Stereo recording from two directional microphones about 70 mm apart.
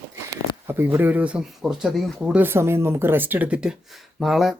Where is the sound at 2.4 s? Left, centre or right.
Right; by 3.8 s centre.